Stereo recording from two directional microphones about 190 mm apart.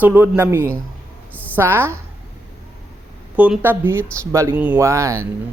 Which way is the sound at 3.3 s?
5° right (ahead or behind).